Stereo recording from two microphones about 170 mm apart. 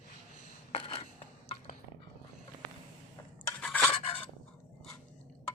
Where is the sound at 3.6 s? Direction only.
5° left (ahead or behind).